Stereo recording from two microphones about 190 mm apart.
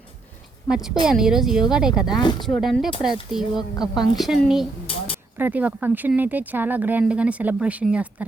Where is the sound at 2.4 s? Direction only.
Centre (ahead or behind).